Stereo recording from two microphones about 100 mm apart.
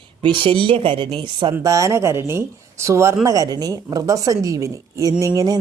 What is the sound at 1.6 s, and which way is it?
A woman's voice, 30° right (ahead or behind).